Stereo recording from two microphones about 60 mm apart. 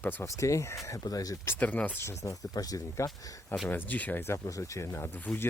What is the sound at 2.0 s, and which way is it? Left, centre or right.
Speech, left.